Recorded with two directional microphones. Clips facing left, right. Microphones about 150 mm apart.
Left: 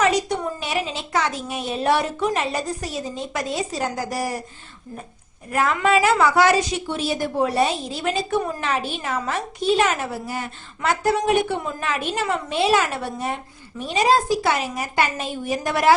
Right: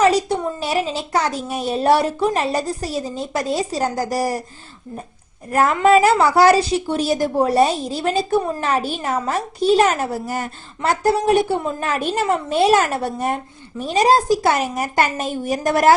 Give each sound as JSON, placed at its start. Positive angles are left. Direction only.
{"t": 0.0, "sound": "a woman's voice", "side_deg": -35}
{"t": 5.5, "sound": "a woman's voice", "side_deg": -40}